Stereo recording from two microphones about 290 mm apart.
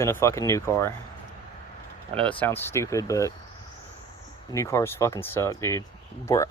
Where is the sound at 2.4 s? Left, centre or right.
Centre.